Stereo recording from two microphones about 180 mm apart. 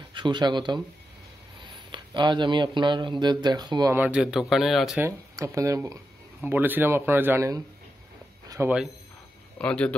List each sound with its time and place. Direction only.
0.1 s speech: 25° right (ahead or behind)
3.9 s speech: 10° right (ahead or behind)
4.9 s a man's voice: 15° right (ahead or behind)
9.6 s speech: 5° left (ahead or behind)